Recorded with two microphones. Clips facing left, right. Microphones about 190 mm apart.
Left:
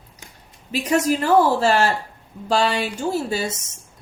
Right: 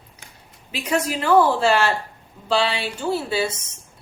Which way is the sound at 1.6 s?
45° left (ahead or behind).